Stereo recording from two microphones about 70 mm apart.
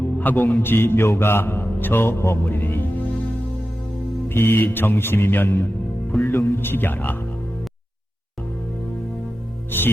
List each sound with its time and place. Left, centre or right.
0.2 s a man's voice: left
0.6 s mantra: left
4.3 s mantra: left